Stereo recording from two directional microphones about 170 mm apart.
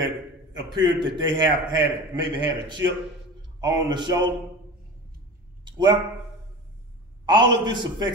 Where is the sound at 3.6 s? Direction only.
25° right (ahead or behind).